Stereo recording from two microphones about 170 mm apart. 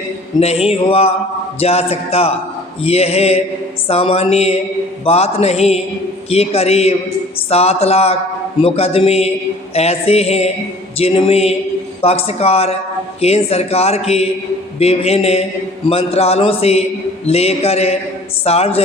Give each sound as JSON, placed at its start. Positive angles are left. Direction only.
{"t": 0.3, "sound": "speech", "side_deg": 35}